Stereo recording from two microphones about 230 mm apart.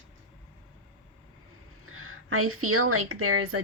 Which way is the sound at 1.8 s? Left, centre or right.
Right.